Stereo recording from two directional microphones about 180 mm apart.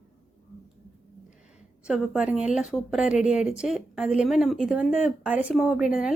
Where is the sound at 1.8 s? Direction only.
5° right (ahead or behind).